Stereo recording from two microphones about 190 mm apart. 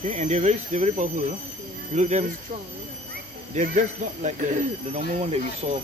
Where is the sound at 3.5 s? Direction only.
40° right (ahead or behind).